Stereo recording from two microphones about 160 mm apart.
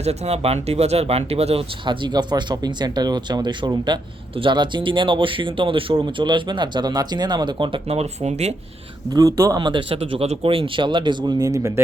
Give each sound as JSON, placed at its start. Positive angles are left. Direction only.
{"t": 0.0, "sound": "speech", "side_deg": -40}
{"t": 9.1, "sound": "speech", "side_deg": -20}